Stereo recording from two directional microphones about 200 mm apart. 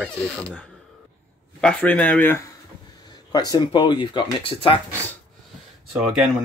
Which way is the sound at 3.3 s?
20° left (ahead or behind).